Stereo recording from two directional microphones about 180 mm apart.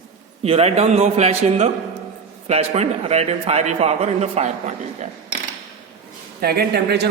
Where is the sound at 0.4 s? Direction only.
35° right (ahead or behind).